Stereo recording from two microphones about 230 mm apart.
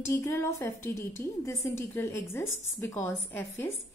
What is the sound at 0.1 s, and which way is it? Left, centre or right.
A woman's voice, centre.